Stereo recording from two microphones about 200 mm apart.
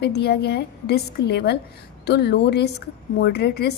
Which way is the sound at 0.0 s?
55° left (ahead or behind).